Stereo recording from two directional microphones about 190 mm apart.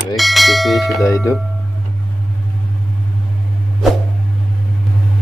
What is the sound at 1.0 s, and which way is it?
Music, 15° left (ahead or behind).